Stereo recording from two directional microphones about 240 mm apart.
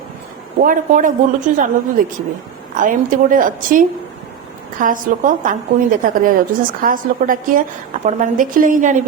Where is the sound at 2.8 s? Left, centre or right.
Right.